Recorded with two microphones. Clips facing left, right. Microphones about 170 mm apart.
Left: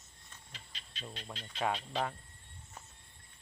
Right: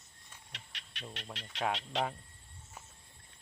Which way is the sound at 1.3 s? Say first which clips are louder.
Even; 80° right.